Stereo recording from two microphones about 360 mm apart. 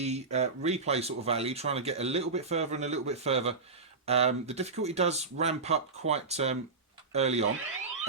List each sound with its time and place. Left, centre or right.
0.0 s speech: centre